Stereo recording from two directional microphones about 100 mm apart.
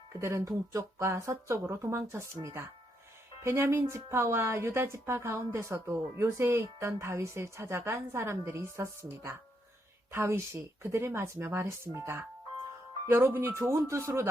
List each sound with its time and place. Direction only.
0.1 s a woman's voice: 30° right (ahead or behind)